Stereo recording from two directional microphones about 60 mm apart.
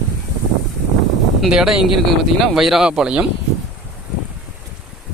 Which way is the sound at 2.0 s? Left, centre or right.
Centre.